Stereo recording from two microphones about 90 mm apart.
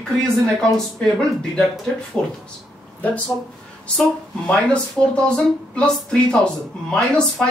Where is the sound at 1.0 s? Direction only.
5° left (ahead or behind).